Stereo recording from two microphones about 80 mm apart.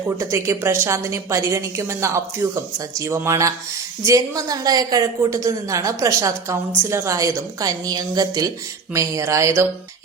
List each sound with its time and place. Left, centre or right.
0.2 s a woman's voice: right
8.9 s a woman's voice: right